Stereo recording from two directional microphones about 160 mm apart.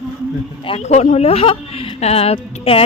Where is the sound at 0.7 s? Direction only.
45° left (ahead or behind).